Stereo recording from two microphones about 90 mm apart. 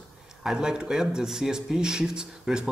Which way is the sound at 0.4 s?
5° right (ahead or behind).